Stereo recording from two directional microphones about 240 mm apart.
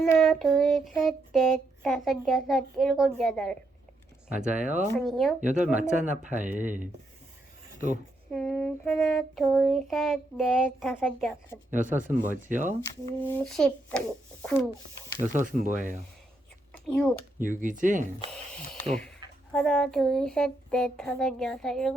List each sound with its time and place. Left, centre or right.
0.2 s a child's voice: centre
4.4 s speech: right
5.0 s a child's voice: centre
5.4 s speech: right
8.3 s a child's voice: centre
11.7 s speech: right
13.2 s a child's voice: centre
15.3 s speech: right
16.7 s a child's voice: centre
17.4 s speech: right
19.5 s a child's voice: centre